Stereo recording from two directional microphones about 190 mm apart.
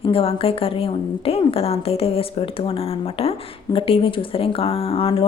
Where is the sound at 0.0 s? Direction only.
30° left (ahead or behind).